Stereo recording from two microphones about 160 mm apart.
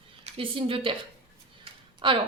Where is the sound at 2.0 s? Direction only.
30° right (ahead or behind).